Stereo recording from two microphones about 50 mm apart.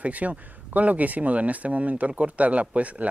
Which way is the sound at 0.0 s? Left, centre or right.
Right.